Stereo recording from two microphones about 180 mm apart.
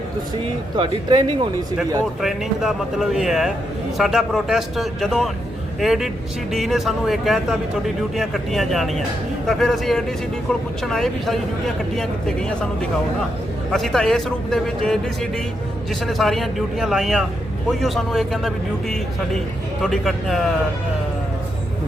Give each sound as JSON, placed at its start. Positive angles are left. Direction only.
{"t": 0.8, "sound": "speech", "side_deg": -25}
{"t": 2.2, "sound": "a man's voice", "side_deg": 0}
{"t": 13.7, "sound": "a man's voice", "side_deg": 0}